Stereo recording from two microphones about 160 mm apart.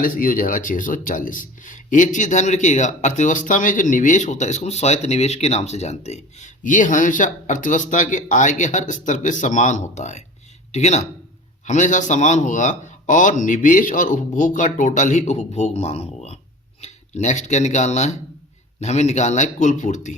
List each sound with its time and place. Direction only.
0.0 s speech: 60° left (ahead or behind)